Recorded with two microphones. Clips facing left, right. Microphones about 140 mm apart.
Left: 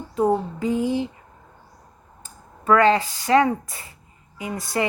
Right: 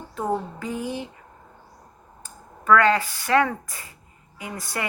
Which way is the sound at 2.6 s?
20° left (ahead or behind).